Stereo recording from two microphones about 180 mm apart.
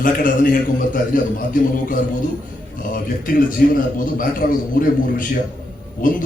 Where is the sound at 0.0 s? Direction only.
50° left (ahead or behind).